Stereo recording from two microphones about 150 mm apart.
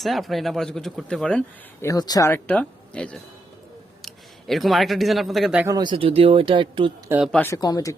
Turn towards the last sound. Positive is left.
turn(degrees=25)  # may be behind; listen again after turning